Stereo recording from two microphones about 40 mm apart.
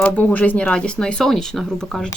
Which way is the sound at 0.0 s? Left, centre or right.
Left.